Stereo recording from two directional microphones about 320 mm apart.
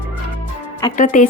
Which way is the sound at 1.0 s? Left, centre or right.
Left.